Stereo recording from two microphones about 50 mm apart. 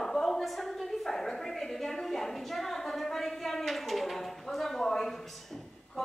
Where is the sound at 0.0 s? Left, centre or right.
Centre.